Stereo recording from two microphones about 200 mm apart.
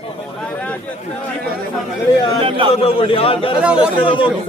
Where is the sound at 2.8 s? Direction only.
30° left (ahead or behind).